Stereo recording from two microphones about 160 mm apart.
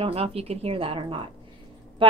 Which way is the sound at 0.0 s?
40° right (ahead or behind).